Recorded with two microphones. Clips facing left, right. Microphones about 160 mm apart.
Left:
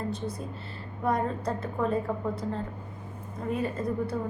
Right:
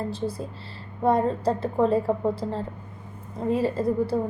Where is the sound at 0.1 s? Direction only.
30° right (ahead or behind).